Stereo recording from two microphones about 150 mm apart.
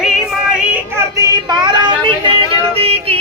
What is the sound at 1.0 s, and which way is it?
Speech, 25° right (ahead or behind).